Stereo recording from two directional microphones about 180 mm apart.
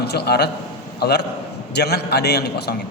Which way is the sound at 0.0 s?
65° left (ahead or behind).